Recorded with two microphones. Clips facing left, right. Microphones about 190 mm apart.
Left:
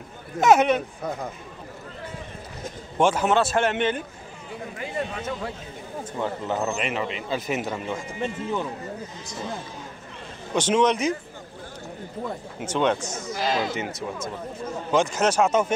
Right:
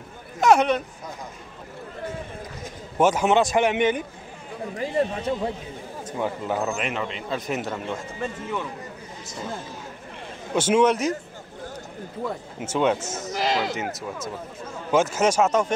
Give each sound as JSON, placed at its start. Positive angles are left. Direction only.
{"t": 0.4, "sound": "a man's voice", "side_deg": 5}
{"t": 3.0, "sound": "speech", "side_deg": -10}
{"t": 4.7, "sound": "speech", "side_deg": -35}
{"t": 6.1, "sound": "speech", "side_deg": -10}
{"t": 6.6, "sound": "a man's voice", "side_deg": 0}
{"t": 8.2, "sound": "speech", "side_deg": 30}
{"t": 10.5, "sound": "speech", "side_deg": -10}
{"t": 12.6, "sound": "speech", "side_deg": -5}
{"t": 13.1, "sound": "a sound", "side_deg": -20}
{"t": 13.9, "sound": "a man's voice", "side_deg": 0}